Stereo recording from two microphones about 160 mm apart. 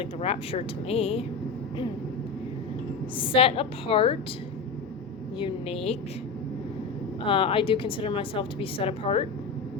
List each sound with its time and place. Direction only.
0.0 s a woman's voice: 40° left (ahead or behind)
3.2 s a woman's voice: 35° left (ahead or behind)
5.4 s a woman's voice: 35° left (ahead or behind)
7.3 s a woman's voice: 35° left (ahead or behind)